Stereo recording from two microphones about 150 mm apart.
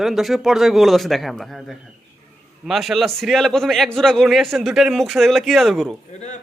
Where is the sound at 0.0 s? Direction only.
Centre (ahead or behind).